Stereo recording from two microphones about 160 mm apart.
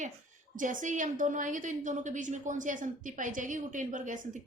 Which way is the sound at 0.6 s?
55° right (ahead or behind).